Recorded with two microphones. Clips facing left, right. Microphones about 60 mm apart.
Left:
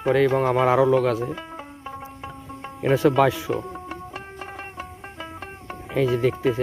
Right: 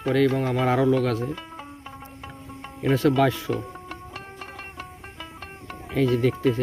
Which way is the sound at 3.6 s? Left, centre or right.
Left.